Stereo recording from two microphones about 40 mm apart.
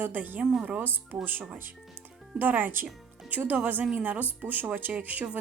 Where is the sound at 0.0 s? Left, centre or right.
Right.